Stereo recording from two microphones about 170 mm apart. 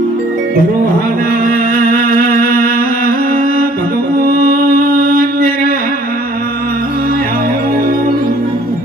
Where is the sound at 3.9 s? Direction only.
60° right (ahead or behind).